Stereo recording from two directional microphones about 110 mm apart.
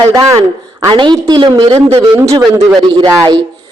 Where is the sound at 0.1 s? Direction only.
30° right (ahead or behind).